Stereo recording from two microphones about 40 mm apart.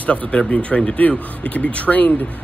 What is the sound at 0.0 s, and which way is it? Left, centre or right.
Speech, left.